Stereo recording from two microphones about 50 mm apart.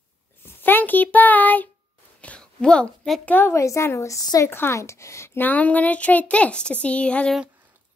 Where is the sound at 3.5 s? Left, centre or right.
Left.